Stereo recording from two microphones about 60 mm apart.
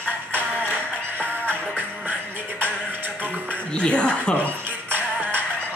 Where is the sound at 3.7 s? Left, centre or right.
Centre.